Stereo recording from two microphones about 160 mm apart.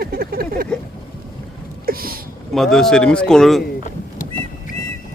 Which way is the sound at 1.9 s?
65° right (ahead or behind).